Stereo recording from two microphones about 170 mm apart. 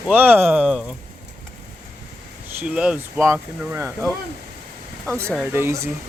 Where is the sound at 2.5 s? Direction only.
10° right (ahead or behind).